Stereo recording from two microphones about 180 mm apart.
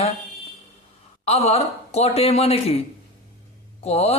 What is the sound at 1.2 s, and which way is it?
Speech, 35° left (ahead or behind).